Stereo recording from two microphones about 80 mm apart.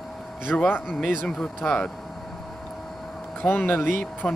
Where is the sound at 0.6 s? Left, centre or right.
Left.